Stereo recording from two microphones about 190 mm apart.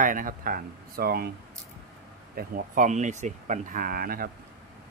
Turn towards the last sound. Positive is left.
turn(degrees=-50)  # may be behind; listen again after turning